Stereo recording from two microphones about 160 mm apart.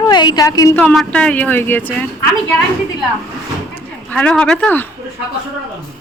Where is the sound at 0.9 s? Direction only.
5° left (ahead or behind).